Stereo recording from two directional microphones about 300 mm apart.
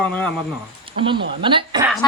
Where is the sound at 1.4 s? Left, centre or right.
Centre.